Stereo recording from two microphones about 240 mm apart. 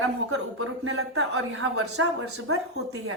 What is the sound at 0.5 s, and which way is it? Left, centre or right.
A woman's voice, right.